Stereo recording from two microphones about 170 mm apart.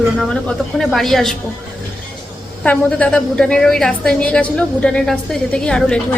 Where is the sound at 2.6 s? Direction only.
10° left (ahead or behind).